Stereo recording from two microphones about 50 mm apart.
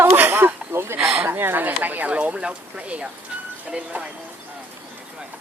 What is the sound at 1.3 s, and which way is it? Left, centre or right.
Speech, right.